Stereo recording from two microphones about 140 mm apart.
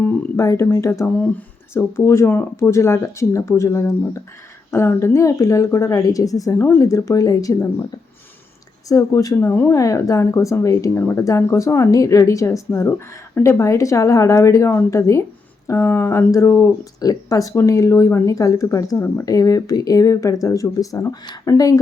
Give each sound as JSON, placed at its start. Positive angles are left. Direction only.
{"t": 0.0, "sound": "speech", "side_deg": 15}
{"t": 8.9, "sound": "speech", "side_deg": 25}